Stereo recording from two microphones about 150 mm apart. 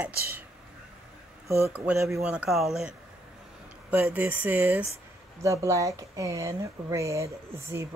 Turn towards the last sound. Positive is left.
turn(degrees=-20)  # may be behind; listen again after turning